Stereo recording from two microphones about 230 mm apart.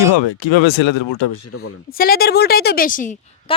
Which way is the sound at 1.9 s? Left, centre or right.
Left.